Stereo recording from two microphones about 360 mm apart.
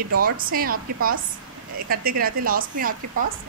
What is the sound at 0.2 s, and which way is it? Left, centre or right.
Speech, right.